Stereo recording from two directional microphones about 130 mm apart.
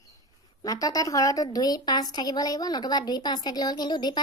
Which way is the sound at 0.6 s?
30° left (ahead or behind).